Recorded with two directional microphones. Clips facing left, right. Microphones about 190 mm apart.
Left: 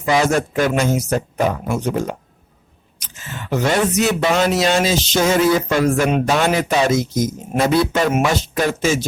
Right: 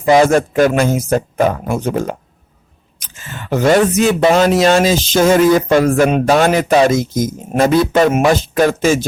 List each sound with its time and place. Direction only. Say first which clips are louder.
0.0 s speech: right 6 dB; 45° right (ahead or behind)